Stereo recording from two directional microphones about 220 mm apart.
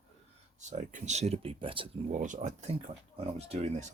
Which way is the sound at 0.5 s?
30° right (ahead or behind).